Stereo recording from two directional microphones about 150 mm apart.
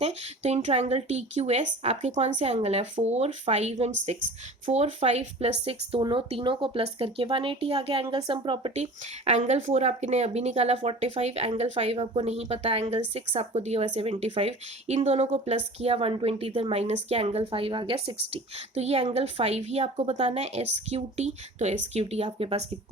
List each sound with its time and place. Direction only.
0.0 s speech: 50° right (ahead or behind)